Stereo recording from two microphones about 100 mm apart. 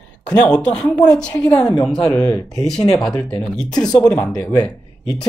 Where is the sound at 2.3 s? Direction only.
35° left (ahead or behind).